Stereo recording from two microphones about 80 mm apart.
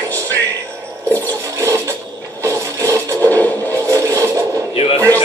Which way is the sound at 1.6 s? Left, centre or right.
Right.